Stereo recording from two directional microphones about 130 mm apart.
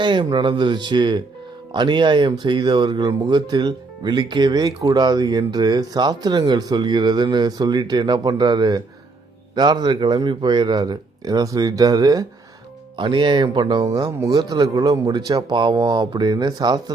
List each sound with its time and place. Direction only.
0.0 s speech: 35° right (ahead or behind)